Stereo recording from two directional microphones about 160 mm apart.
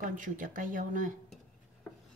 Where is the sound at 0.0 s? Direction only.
55° right (ahead or behind).